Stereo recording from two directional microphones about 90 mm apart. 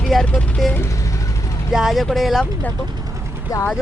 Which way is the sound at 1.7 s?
Centre (ahead or behind).